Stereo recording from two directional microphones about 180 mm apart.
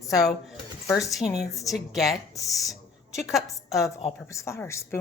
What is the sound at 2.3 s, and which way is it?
Speech, 20° left (ahead or behind).